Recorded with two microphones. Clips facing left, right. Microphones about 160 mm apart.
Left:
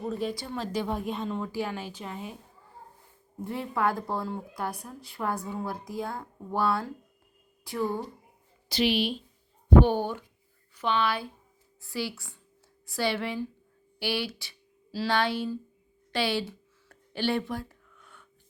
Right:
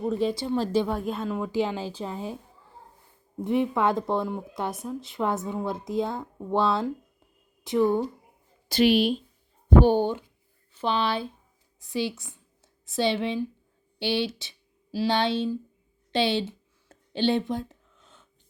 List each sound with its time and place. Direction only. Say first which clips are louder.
0.3 s speech: right 7 dB; 25° right (ahead or behind)
0.9 s a woman's voice: right 2 dB; centre (ahead or behind)
1.5 s a woman's voice: right 6 dB; 25° right (ahead or behind)
3.4 s a woman's voice: right 5 dB; 20° right (ahead or behind)
8.7 s a woman's voice: right 6 dB; 50° right (ahead or behind)
9.6 s speech: right 2 dB; 30° right (ahead or behind)
16.1 s a sound: right 4 dB; 25° right (ahead or behind)